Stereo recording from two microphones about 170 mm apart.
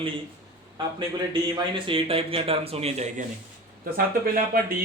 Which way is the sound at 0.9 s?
30° right (ahead or behind).